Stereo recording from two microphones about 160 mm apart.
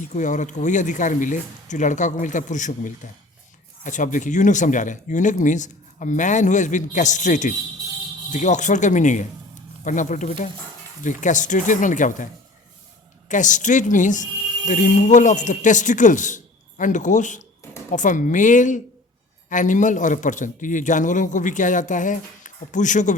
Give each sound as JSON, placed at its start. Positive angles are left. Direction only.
{"t": 0.0, "sound": "a man's voice", "side_deg": 50}